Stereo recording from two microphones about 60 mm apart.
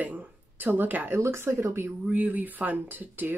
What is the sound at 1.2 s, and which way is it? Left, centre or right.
Speech, right.